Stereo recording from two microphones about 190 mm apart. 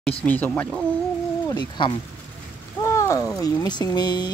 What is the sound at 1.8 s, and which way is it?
Speech, 25° left (ahead or behind).